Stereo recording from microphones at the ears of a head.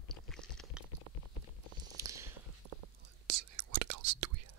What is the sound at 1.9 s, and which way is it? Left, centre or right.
Whispering, right.